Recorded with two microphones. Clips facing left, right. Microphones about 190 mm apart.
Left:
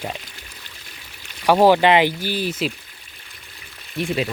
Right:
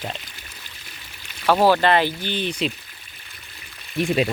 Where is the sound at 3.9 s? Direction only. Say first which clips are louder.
Right 3 dB; 20° right (ahead or behind).